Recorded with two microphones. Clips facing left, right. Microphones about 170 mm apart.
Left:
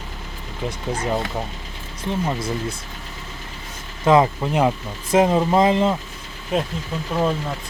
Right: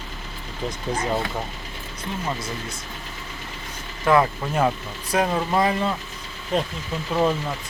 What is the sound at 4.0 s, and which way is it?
Speech, 20° left (ahead or behind).